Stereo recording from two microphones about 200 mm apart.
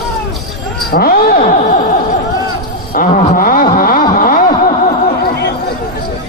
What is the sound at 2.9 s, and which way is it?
Wail, 40° left (ahead or behind).